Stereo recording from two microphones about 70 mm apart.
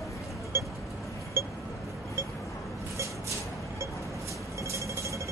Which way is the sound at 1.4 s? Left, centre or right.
Right.